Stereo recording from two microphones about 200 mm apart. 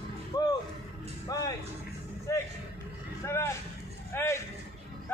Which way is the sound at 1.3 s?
20° left (ahead or behind).